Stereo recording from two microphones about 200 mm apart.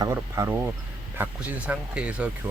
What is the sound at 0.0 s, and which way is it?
Speech, 15° right (ahead or behind).